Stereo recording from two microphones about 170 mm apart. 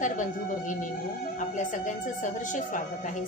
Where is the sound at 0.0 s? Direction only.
50° left (ahead or behind).